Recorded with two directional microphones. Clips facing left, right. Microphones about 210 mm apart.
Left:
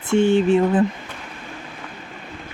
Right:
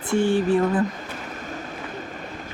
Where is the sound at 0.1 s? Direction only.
25° left (ahead or behind).